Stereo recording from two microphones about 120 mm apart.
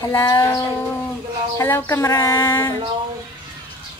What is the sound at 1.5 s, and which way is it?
Speech, 15° left (ahead or behind).